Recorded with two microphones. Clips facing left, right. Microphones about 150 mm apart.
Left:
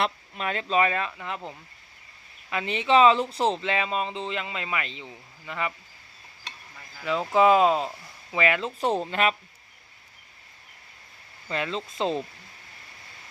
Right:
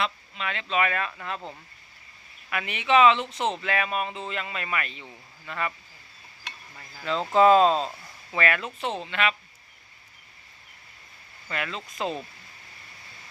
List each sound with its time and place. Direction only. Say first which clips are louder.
0.0 s speech: left 2 dB; 40° left (ahead or behind); by 5.7 s 15° left (ahead or behind)
7.0 s speech: right 1 dB; 10° left (ahead or behind)
8.8 s speech: left 5 dB; 40° left (ahead or behind)
11.5 s speech: left 3 dB; 25° left (ahead or behind)